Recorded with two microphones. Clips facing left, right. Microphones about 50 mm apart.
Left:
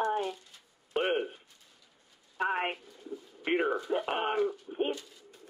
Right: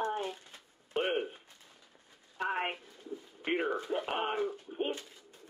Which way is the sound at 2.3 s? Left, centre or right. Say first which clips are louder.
Left 3 dB; centre.